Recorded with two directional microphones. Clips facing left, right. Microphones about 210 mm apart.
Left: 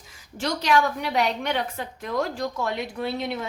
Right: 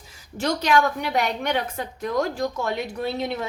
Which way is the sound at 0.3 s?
45° right (ahead or behind).